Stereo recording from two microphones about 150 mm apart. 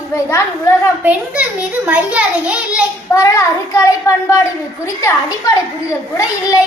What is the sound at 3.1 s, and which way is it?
A child's voice, 20° left (ahead or behind).